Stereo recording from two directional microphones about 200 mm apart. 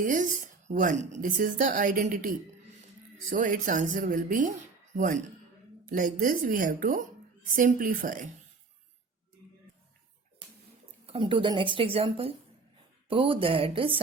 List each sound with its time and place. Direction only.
0.0 s a woman's voice: 40° right (ahead or behind)
11.0 s speech: 25° right (ahead or behind)